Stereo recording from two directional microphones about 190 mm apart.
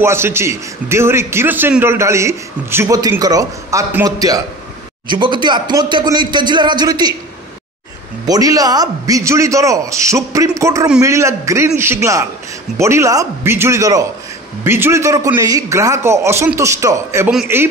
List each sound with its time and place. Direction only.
0.0 s a man's voice: 15° right (ahead or behind)
8.3 s a man's voice: 20° right (ahead or behind)